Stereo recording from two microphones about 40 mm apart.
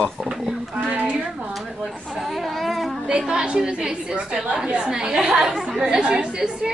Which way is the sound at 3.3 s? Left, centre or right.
Right.